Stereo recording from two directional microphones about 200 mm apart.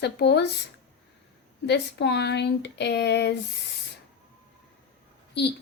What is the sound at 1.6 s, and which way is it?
Speech, 60° left (ahead or behind).